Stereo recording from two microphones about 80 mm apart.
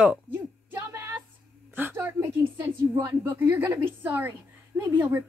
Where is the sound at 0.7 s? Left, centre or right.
Right.